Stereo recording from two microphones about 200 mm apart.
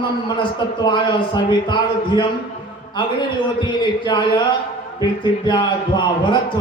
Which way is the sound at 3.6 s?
20° left (ahead or behind).